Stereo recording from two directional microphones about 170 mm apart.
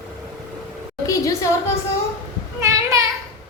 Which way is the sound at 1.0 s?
20° left (ahead or behind).